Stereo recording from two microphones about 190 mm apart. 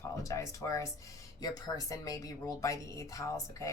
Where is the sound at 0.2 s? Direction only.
15° left (ahead or behind).